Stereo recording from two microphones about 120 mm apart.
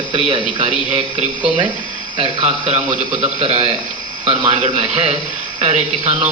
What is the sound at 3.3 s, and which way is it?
A man's voice, 55° right (ahead or behind).